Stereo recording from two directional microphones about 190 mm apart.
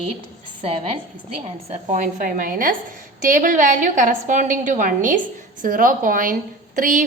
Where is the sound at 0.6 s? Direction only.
35° right (ahead or behind).